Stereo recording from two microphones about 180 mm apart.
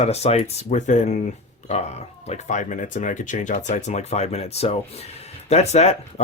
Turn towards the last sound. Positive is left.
turn(degrees=35)  # may be behind; listen again after turning